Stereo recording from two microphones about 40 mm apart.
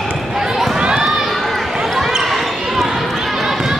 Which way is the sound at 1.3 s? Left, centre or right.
Centre.